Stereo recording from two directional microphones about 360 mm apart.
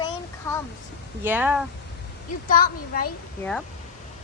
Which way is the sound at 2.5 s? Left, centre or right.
Left.